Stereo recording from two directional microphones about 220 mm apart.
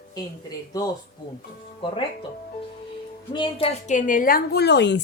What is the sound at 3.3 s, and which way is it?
A woman's voice, 25° left (ahead or behind).